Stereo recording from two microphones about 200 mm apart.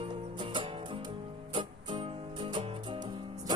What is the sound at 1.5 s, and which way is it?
Music, 25° right (ahead or behind).